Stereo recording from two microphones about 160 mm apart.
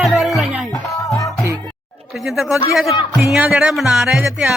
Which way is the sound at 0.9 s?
20° left (ahead or behind).